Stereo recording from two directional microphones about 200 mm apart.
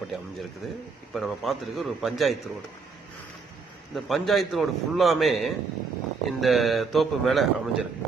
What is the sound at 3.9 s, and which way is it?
A man's voice, centre (ahead or behind).